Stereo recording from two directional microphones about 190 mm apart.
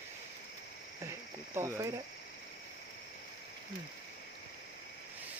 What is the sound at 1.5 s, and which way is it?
Speech, 15° right (ahead or behind).